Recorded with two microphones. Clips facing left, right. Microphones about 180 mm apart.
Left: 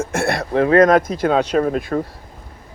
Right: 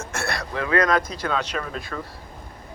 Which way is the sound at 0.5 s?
30° left (ahead or behind).